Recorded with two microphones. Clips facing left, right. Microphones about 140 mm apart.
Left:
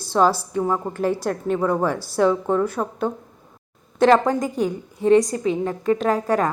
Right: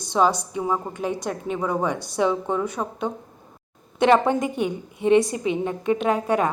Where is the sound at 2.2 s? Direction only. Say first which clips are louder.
Left 4 dB; 15° right (ahead or behind).